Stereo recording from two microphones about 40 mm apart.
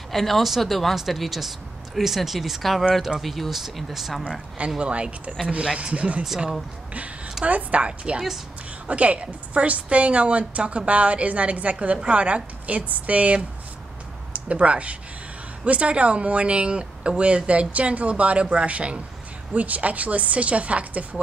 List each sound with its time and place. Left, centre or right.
0.1 s speech: centre
4.6 s a woman's voice: right
7.4 s a woman's voice: right
19.5 s a woman's voice: right